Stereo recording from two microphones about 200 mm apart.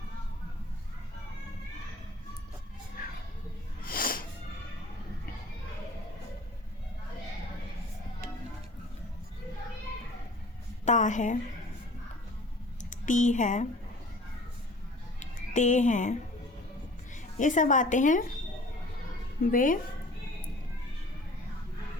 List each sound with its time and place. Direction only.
3.8 s cat: 45° left (ahead or behind)
10.8 s speech: 40° left (ahead or behind)
12.8 s speech: 40° left (ahead or behind)
15.2 s speech: 35° left (ahead or behind)
17.3 s speech: 40° left (ahead or behind)
19.5 s speech: 40° left (ahead or behind)